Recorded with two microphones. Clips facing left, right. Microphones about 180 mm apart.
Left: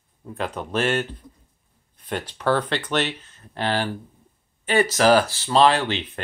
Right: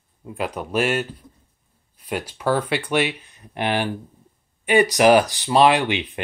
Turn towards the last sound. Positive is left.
turn(degrees=-15)  # may be behind; listen again after turning